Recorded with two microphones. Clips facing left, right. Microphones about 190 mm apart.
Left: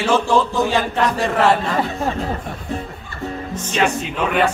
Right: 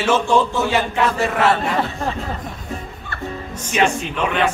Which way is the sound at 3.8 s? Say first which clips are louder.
Left 1 dB; 10° left (ahead or behind).